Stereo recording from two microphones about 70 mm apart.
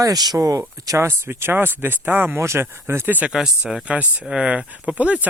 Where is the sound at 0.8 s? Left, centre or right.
Right.